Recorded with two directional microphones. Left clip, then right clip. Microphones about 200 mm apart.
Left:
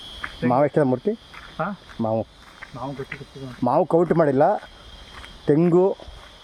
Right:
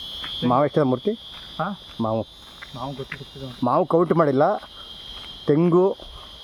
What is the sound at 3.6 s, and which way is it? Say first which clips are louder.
Speech: even; centre (ahead or behind).